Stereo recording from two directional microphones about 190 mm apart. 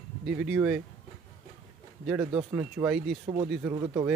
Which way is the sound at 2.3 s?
20° right (ahead or behind).